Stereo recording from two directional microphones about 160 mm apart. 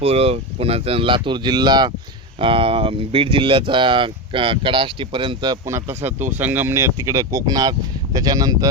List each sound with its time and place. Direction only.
0.0 s speech: 40° right (ahead or behind)
5.6 s speech: 15° right (ahead or behind)